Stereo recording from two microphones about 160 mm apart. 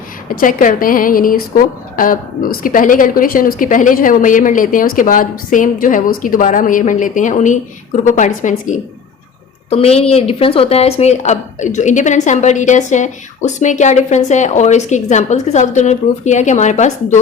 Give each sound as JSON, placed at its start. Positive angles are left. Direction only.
{"t": 0.3, "sound": "a woman's voice", "side_deg": 55}
{"t": 9.6, "sound": "speech", "side_deg": 40}